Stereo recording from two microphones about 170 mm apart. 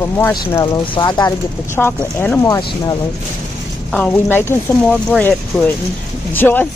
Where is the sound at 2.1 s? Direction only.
10° left (ahead or behind).